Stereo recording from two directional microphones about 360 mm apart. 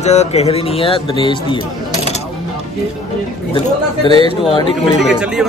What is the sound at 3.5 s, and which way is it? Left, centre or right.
A man's voice, centre.